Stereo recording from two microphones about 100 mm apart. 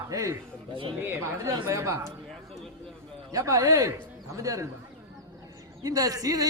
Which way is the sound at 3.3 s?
30° right (ahead or behind).